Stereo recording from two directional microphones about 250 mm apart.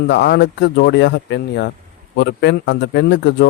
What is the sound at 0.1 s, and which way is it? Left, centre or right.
A man's voice, left.